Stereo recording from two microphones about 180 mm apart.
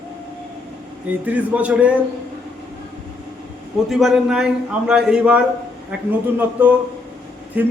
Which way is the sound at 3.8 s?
Centre (ahead or behind).